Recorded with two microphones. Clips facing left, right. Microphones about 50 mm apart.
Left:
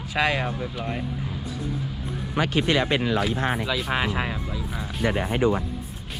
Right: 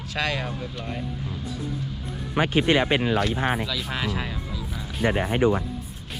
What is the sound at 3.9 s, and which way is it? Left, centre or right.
Speech, left.